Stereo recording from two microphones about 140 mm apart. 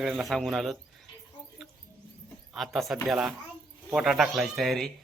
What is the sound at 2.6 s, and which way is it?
A man's voice, centre (ahead or behind).